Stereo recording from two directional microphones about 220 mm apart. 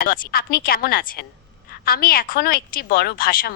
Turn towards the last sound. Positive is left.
turn(degrees=40)  # may be behind; listen again after turning